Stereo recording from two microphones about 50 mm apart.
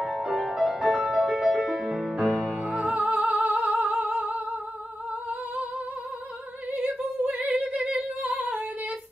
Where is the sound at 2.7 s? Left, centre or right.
Right.